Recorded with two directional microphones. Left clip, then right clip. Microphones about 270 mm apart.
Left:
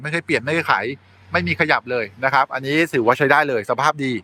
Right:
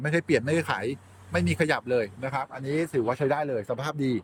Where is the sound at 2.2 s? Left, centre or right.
Left.